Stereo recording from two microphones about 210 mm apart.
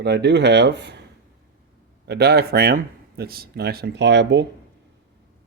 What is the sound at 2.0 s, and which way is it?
Speech, 50° right (ahead or behind).